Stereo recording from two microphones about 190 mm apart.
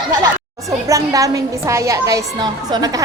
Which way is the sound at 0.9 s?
15° right (ahead or behind).